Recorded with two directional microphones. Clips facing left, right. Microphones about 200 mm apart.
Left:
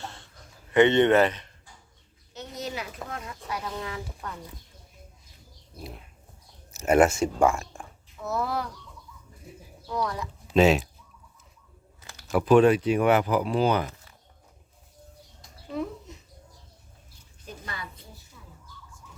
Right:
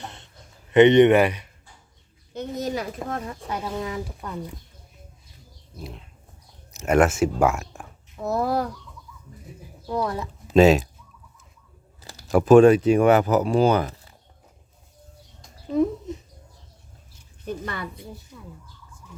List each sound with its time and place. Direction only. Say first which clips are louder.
0.0 s a sound: right 1 dB; 20° right (ahead or behind)
0.7 s speech: right 5 dB; 20° right (ahead or behind)
2.3 s speech: right 7 dB; 50° right (ahead or behind); by 4.4 s 15° right (ahead or behind)
5.8 s speech: right 2 dB; 5° left (ahead or behind)
8.1 s speech: right 6 dB; 35° right (ahead or behind)
9.8 s speech: right 4 dB; 30° right (ahead or behind)
10.5 s speech: right 5 dB; 40° right (ahead or behind)
11.9 s speech: right 5 dB; 35° right (ahead or behind)
17.4 s speech: right 9 dB; 55° right (ahead or behind)